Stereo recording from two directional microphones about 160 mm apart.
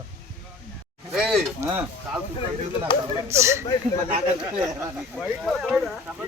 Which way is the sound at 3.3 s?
15° right (ahead or behind).